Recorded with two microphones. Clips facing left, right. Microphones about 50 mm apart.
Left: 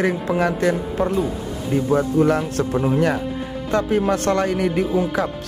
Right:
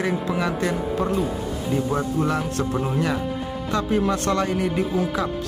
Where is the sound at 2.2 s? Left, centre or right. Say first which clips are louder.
Left 5 dB; left.